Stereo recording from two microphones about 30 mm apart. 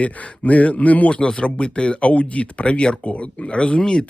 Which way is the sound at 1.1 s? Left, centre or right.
Left.